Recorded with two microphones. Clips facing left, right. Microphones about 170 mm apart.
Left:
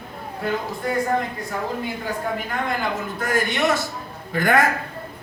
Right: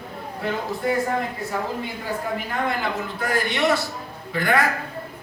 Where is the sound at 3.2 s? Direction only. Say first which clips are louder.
Left 1 dB; 45° left (ahead or behind).